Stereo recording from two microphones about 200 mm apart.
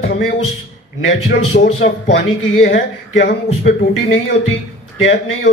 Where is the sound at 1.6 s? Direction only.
55° left (ahead or behind).